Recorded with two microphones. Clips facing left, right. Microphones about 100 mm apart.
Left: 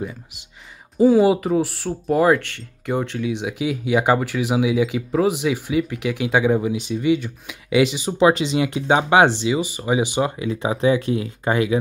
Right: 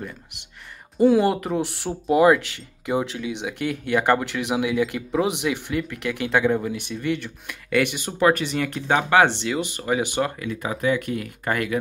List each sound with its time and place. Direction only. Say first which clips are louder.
0.9 s speech: left 3 dB; 5° left (ahead or behind)
9.4 s speech: left 4 dB; 5° left (ahead or behind)
10.4 s speech: left 5 dB; 20° left (ahead or behind)